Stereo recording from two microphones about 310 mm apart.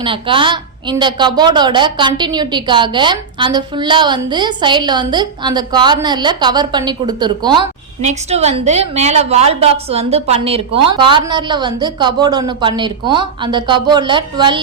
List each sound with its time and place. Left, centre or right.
0.0 s a woman's voice: centre